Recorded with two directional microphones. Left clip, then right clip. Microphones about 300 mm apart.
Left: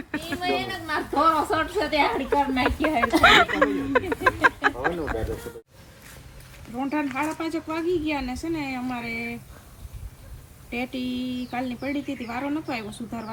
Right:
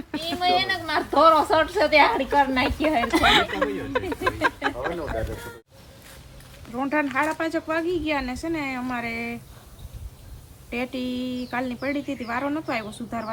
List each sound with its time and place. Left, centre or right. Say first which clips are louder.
0.1 s speech: right 4 dB; centre
6.7 s speech: right 3 dB; centre
10.7 s speech: right 1 dB; centre